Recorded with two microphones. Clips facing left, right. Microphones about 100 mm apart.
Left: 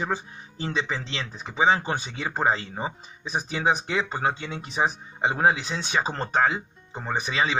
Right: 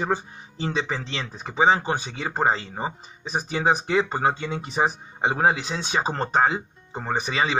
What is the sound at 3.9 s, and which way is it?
Speech, 40° right (ahead or behind).